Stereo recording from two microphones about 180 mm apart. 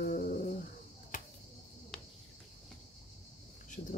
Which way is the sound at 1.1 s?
45° left (ahead or behind).